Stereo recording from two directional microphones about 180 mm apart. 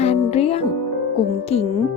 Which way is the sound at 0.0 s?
35° left (ahead or behind).